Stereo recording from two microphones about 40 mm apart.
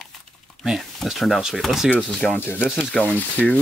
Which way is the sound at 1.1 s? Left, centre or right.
Centre.